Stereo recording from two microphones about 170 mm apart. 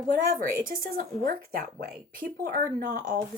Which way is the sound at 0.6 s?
55° right (ahead or behind).